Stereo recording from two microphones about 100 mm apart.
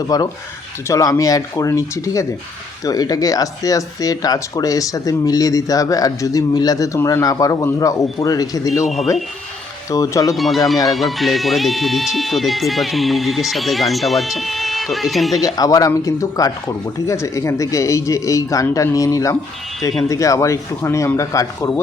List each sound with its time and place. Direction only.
0.1 s speech: 40° left (ahead or behind)
8.8 s speech: centre (ahead or behind)
9.9 s speech: 35° left (ahead or behind)
10.3 s speech: centre (ahead or behind)
15.4 s speech: 40° left (ahead or behind)